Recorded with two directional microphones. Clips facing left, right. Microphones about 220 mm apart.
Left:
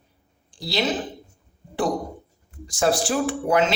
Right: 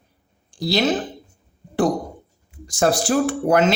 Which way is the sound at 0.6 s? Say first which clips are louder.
Right 5 dB; 45° right (ahead or behind).